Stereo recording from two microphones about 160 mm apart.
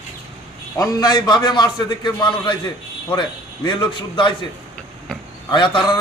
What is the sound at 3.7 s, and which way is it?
Speech, 30° left (ahead or behind).